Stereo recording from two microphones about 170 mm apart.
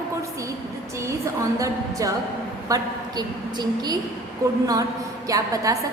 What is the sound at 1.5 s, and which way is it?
A woman's voice, 20° right (ahead or behind).